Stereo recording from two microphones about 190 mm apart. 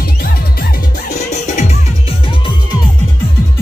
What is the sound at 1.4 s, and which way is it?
Music, 40° left (ahead or behind).